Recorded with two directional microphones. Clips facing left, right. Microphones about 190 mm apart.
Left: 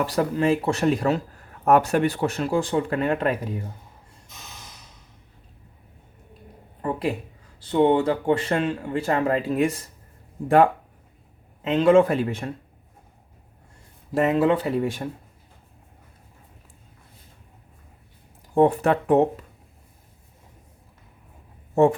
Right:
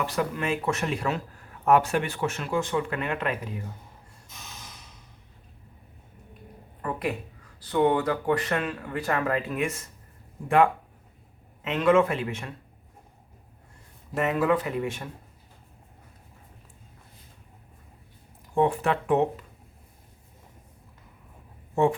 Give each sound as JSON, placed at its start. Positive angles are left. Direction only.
{"t": 0.0, "sound": "speech", "side_deg": 35}
{"t": 6.8, "sound": "a sound", "side_deg": 30}
{"t": 7.6, "sound": "speech", "side_deg": 25}
{"t": 11.6, "sound": "speech", "side_deg": 30}
{"t": 14.1, "sound": "speech", "side_deg": 30}
{"t": 18.5, "sound": "speech", "side_deg": 40}